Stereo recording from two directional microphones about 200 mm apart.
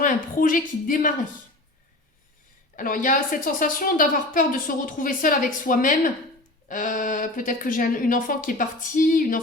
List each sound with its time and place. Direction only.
0.0 s a woman's voice: 45° left (ahead or behind)
2.7 s a woman's voice: 45° left (ahead or behind)